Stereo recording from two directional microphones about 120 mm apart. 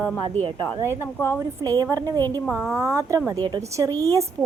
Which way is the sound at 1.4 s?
30° right (ahead or behind).